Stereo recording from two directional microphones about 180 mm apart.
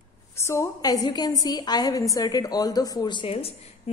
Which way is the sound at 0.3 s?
15° left (ahead or behind).